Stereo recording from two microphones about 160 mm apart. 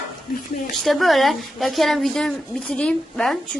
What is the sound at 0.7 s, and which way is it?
Speech, centre (ahead or behind).